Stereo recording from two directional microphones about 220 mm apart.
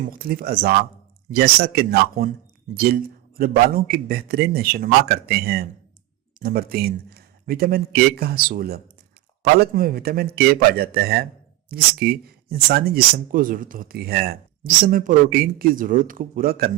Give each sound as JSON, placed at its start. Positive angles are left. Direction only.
{"t": 0.1, "sound": "a man's voice", "side_deg": -40}